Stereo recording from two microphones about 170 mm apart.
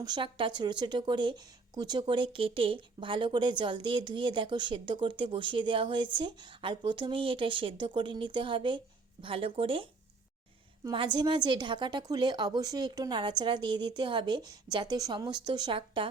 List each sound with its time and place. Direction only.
0.0 s speech: 25° right (ahead or behind)
10.9 s speech: 25° right (ahead or behind)